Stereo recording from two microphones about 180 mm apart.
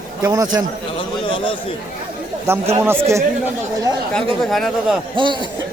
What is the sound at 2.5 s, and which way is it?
Speech, 15° right (ahead or behind).